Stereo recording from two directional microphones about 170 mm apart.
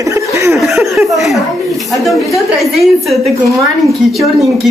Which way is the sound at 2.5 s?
Centre (ahead or behind).